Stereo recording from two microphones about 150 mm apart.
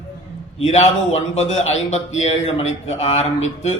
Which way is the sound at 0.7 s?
45° left (ahead or behind).